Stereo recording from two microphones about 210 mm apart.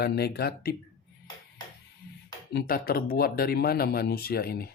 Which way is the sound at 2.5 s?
50° left (ahead or behind).